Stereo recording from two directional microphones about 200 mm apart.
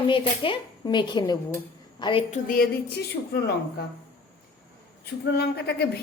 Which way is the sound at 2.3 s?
45° left (ahead or behind).